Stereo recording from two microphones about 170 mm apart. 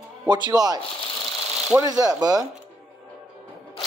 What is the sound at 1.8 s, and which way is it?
Speech, 20° right (ahead or behind).